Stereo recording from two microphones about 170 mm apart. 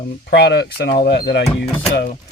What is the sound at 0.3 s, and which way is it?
Speech, 75° left (ahead or behind).